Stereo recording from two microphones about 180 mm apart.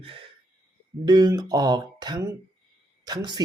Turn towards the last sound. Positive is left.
turn(degrees=-20)  # may be behind; listen again after turning